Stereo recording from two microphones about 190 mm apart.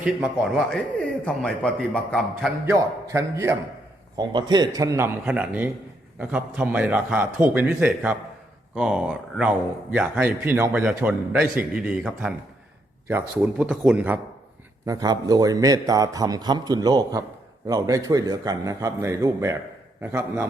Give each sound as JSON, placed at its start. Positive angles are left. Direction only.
{"t": 0.0, "sound": "a man's voice", "side_deg": -5}
{"t": 2.6, "sound": "a man's voice", "side_deg": -15}
{"t": 14.8, "sound": "a man's voice", "side_deg": -20}